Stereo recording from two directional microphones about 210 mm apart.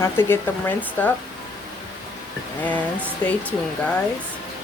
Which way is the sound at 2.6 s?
5° left (ahead or behind).